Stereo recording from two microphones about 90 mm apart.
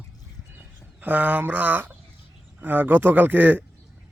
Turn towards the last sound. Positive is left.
turn(degrees=-20)  # may be behind; listen again after turning